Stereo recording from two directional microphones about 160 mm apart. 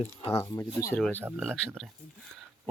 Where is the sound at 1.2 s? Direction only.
15° right (ahead or behind).